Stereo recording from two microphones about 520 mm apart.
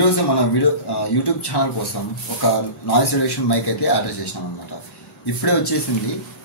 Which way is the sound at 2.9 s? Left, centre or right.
Left.